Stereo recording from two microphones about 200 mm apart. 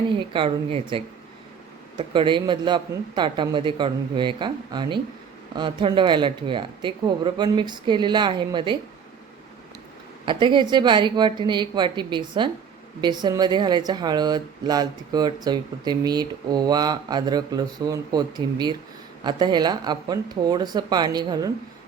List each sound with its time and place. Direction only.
0.2 s speech: 25° right (ahead or behind)
10.2 s speech: 25° right (ahead or behind)